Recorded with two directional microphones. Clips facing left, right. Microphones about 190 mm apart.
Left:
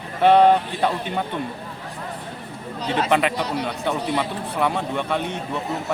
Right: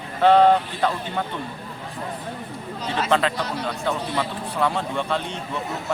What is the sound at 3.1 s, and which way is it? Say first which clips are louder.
Speech: even; 15° left (ahead or behind).